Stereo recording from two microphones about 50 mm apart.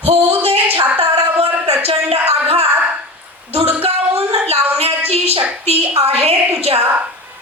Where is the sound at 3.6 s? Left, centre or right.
Right.